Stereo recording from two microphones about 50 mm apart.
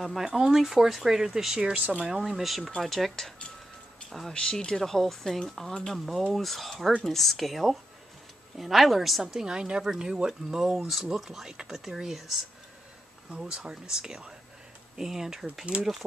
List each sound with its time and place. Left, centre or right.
0.0 s speech: centre
1.7 s speech: right
2.2 s speech: centre
4.3 s speech: centre
4.8 s speech: centre
9.2 s speech: centre
10.8 s speech: centre
13.3 s speech: centre
15.7 s speech: right